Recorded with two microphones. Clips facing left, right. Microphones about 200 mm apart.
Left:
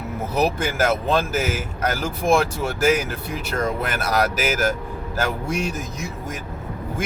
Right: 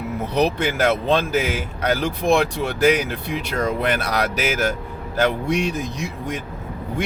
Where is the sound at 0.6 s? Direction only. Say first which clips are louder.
Right 2 dB; 40° left (ahead or behind).